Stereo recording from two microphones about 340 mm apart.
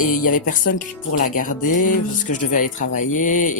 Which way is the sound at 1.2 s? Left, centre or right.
Left.